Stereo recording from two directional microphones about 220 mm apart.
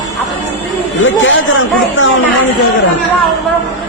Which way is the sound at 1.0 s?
60° left (ahead or behind).